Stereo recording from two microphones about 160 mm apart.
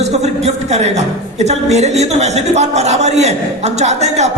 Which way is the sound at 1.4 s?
45° right (ahead or behind).